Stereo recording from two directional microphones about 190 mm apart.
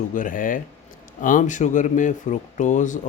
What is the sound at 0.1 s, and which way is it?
Speech, 45° left (ahead or behind).